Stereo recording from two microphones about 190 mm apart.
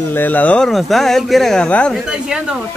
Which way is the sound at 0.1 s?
10° left (ahead or behind).